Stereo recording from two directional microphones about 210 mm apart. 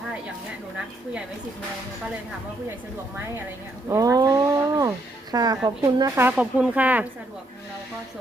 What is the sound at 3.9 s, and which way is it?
Speech, 15° right (ahead or behind).